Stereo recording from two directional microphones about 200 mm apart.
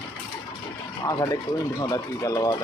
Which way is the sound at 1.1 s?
15° left (ahead or behind).